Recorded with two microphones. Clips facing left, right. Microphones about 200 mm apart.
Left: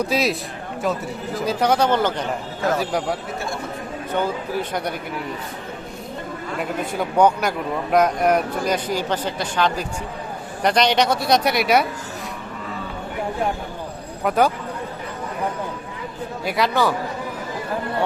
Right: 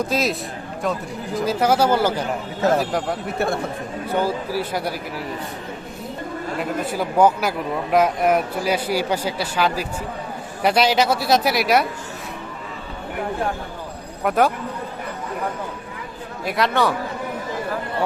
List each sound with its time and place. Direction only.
0.0 s speech: centre (ahead or behind)
1.4 s speech: 5° right (ahead or behind)
3.3 s speech: 60° right (ahead or behind)
4.1 s speech: 5° right (ahead or behind)
6.6 s speech: 5° right (ahead or behind)
14.3 s speech: centre (ahead or behind)
16.5 s speech: centre (ahead or behind)